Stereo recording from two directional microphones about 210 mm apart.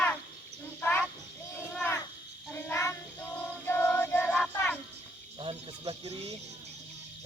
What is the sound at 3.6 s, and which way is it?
Music, 10° left (ahead or behind).